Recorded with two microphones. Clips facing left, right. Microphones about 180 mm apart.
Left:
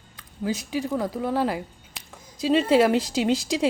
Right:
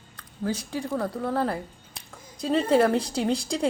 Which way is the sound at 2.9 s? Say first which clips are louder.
Left 2 dB; 90° left.